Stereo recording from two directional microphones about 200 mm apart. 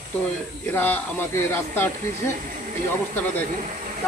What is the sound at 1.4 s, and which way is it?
Speech, 10° left (ahead or behind).